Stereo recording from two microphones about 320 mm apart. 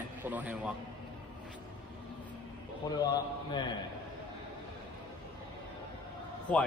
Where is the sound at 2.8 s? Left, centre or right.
Centre.